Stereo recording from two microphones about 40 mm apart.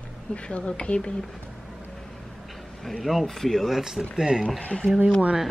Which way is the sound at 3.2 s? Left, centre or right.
Centre.